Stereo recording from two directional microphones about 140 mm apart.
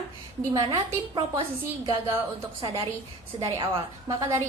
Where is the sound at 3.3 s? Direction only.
35° right (ahead or behind).